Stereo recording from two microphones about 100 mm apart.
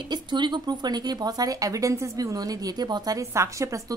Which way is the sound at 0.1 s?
50° right (ahead or behind).